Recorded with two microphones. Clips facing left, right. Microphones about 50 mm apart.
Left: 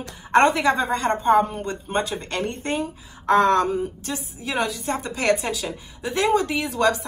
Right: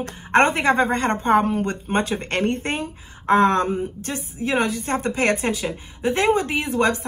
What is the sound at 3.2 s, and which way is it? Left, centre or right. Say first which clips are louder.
A woman's voice: even; right.